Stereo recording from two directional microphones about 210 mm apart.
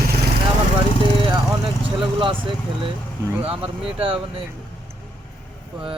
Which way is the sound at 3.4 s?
25° right (ahead or behind).